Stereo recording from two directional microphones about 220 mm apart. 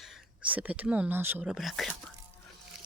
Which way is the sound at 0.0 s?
5° right (ahead or behind).